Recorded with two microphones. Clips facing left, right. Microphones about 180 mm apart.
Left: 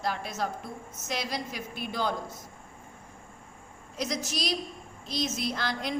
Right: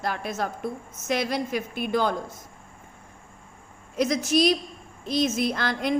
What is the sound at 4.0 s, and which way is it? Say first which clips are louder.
A woman's voice: right 11 dB; 55° right (ahead or behind).